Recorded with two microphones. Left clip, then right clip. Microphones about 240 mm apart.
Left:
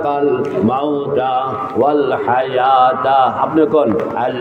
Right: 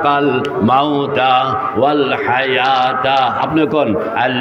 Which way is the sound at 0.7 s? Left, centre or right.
Right.